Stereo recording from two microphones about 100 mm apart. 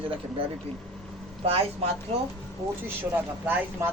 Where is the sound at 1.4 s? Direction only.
80° right.